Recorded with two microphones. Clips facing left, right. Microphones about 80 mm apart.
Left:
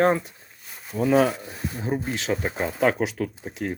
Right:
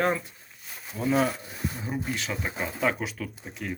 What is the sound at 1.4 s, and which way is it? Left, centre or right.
Speech, left.